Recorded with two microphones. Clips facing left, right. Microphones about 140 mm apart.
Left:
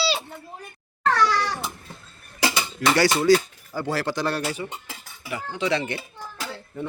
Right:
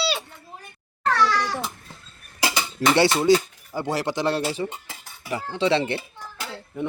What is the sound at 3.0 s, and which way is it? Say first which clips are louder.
Speech: even; 25° right (ahead or behind).